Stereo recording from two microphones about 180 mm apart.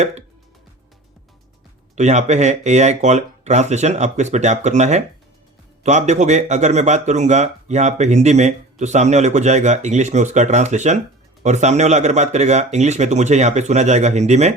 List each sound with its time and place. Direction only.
2.0 s speech: 40° right (ahead or behind)